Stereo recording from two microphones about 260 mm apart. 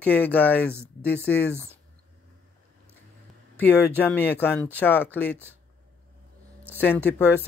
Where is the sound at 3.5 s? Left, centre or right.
Centre.